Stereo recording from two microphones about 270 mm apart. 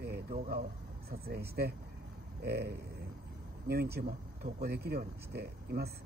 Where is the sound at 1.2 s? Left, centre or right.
Right.